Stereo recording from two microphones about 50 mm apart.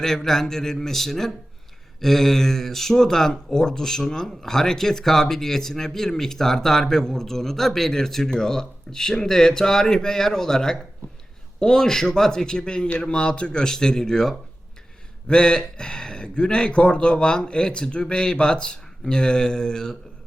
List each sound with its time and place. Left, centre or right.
0.0 s speech: centre